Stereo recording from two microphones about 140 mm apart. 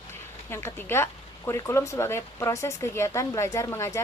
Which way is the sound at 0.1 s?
15° left (ahead or behind).